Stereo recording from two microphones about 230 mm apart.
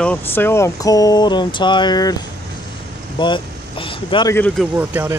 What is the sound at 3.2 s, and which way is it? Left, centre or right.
Speech, left.